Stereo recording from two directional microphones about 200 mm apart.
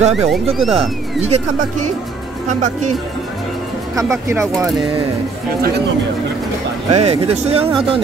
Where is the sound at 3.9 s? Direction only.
15° right (ahead or behind).